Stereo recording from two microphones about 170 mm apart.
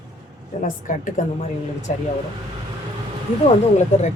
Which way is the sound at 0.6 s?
50° left (ahead or behind).